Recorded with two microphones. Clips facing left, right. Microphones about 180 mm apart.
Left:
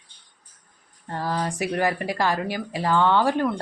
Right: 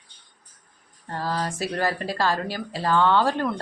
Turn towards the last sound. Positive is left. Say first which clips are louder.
# left 1 dB
turn(degrees=15)  # may be behind; listen again after turning